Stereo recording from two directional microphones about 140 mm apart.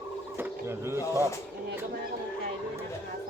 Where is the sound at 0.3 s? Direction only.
15° right (ahead or behind).